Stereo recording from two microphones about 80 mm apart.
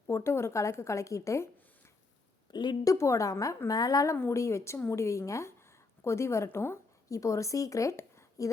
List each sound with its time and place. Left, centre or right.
0.1 s a woman's voice: left
2.5 s speech: left
2.8 s a woman's voice: left
7.1 s speech: left